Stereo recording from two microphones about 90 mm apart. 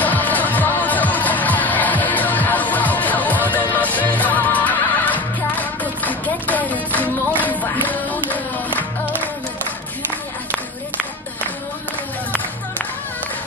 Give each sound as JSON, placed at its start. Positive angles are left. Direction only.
{"t": 0.0, "sound": "music", "side_deg": 20}